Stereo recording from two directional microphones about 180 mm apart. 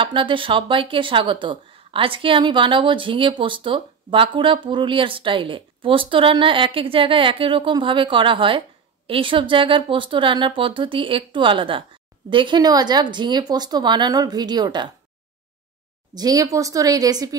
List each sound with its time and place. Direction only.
0.0 s speech: 30° right (ahead or behind)
16.2 s speech: 20° right (ahead or behind)